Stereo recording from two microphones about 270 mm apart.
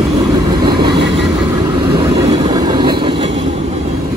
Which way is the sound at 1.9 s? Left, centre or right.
Centre.